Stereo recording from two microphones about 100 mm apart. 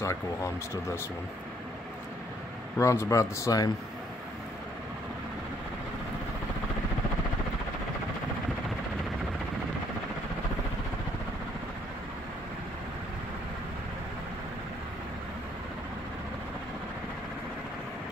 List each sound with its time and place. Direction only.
0.0 s speech: 30° left (ahead or behind)
2.8 s a man's voice: 30° left (ahead or behind)